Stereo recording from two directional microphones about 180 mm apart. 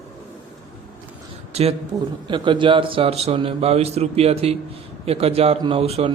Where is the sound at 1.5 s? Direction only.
35° right (ahead or behind).